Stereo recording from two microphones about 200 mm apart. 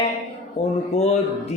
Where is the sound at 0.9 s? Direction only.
30° left (ahead or behind).